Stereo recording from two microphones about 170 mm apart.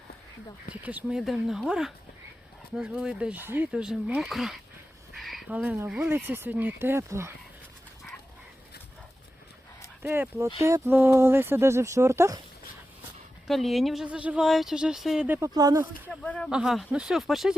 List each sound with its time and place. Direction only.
0.7 s speech: 10° right (ahead or behind)
10.0 s speech: 10° right (ahead or behind)
13.5 s speech: centre (ahead or behind)
15.4 s speech: 20° right (ahead or behind)
16.0 s speech: 10° left (ahead or behind)
16.5 s speech: 5° right (ahead or behind)